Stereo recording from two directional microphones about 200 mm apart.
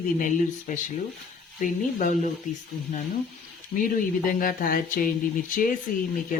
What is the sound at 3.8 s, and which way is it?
Speech, 45° left (ahead or behind).